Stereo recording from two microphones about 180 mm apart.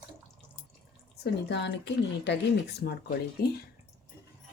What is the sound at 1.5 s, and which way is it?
Speech, 75° left (ahead or behind).